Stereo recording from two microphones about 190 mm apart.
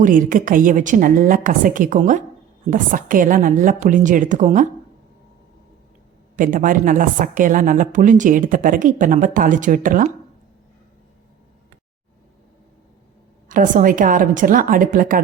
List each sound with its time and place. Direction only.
0.0 s a woman's voice: 45° right (ahead or behind)
6.3 s a woman's voice: 45° right (ahead or behind)
13.5 s a woman's voice: 45° right (ahead or behind)